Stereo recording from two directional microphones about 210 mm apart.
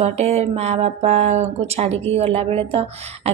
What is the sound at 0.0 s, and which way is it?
Speech, 30° right (ahead or behind).